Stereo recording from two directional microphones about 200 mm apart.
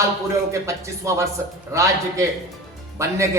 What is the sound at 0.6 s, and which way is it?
Speech, 15° right (ahead or behind).